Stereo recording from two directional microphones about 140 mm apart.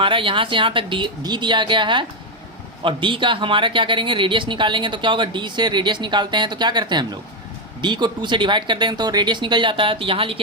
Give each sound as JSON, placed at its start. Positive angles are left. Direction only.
{"t": 0.0, "sound": "speech", "side_deg": -40}